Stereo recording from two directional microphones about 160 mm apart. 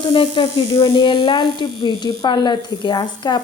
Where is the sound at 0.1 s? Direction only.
30° left (ahead or behind).